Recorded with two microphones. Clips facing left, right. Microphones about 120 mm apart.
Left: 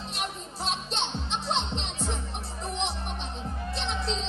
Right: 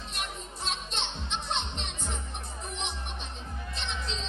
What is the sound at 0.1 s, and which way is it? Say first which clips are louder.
Music: left 3 dB; 30° left (ahead or behind).